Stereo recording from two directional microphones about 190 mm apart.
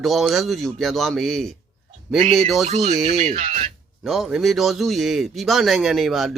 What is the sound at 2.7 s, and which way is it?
Speech, 35° right (ahead or behind).